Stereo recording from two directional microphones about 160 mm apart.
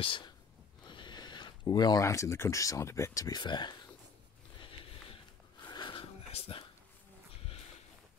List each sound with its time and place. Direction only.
0.0 s speech: 35° left (ahead or behind)
4.6 s sniff: 35° left (ahead or behind)
5.7 s a sound: 30° left (ahead or behind)